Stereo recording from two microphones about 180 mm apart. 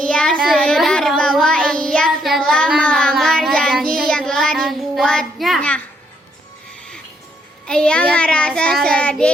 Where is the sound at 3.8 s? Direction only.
55° right (ahead or behind).